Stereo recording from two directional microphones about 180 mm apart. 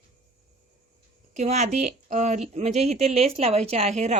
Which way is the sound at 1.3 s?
40° right (ahead or behind).